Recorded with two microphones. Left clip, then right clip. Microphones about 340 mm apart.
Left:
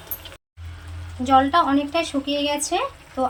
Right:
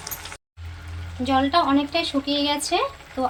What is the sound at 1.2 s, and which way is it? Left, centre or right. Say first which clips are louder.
Speech: left 3 dB; centre.